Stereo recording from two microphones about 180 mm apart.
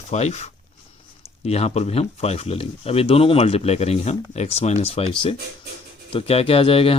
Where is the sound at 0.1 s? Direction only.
40° left (ahead or behind).